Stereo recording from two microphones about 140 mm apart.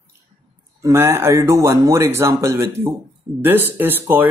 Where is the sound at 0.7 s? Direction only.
20° right (ahead or behind).